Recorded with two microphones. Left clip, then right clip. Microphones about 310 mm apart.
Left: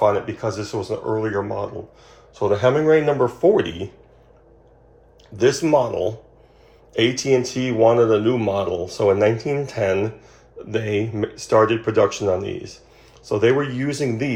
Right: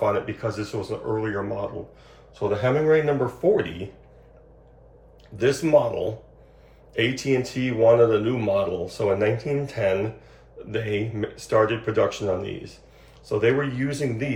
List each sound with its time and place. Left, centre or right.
0.0 s speech: centre
5.4 s speech: centre